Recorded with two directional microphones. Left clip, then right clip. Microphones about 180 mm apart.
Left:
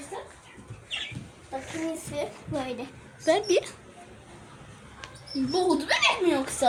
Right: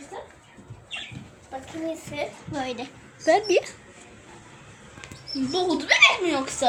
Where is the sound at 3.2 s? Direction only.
25° right (ahead or behind).